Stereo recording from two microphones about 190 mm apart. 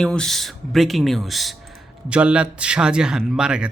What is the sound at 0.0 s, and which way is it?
A man's voice, 5° left (ahead or behind).